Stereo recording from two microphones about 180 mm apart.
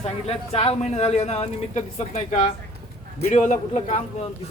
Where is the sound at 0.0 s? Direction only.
35° left (ahead or behind).